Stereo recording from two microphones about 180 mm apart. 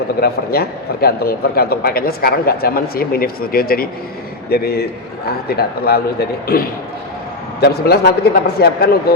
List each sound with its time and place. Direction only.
0.2 s a man's voice: 60° left (ahead or behind)